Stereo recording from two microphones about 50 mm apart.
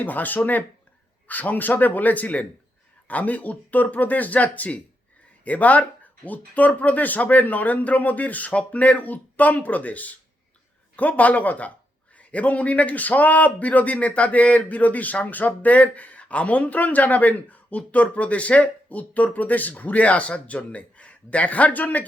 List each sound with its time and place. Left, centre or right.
0.0 s speech: left